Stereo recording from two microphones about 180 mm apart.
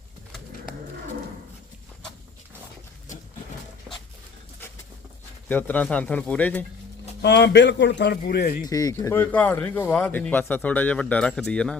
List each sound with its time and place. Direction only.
5.5 s speech: 10° left (ahead or behind)
7.2 s speech: 75° left (ahead or behind)
8.6 s speech: 20° left (ahead or behind)